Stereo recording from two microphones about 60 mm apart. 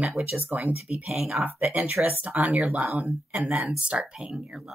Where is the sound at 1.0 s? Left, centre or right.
Centre.